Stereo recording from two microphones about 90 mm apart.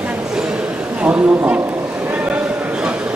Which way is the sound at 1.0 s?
15° right (ahead or behind).